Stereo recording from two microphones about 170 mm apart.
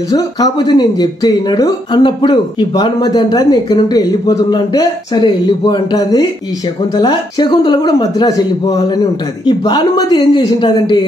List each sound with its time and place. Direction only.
0.1 s speech: 25° left (ahead or behind)